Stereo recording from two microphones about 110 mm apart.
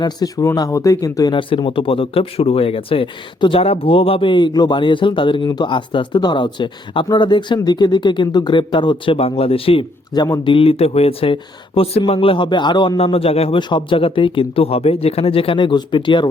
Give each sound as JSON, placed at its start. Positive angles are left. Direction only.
{"t": 0.0, "sound": "speech", "side_deg": 35}
{"t": 1.3, "sound": "speech", "side_deg": 50}
{"t": 10.1, "sound": "speech", "side_deg": 40}
{"t": 10.5, "sound": "speech", "side_deg": 60}
{"t": 13.0, "sound": "speech", "side_deg": 60}
{"t": 13.6, "sound": "speech", "side_deg": 45}